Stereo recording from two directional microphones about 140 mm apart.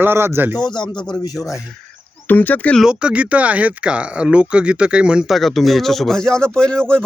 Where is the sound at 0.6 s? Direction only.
30° left (ahead or behind).